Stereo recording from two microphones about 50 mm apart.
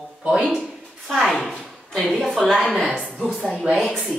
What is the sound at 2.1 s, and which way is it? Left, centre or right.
A woman's voice, centre.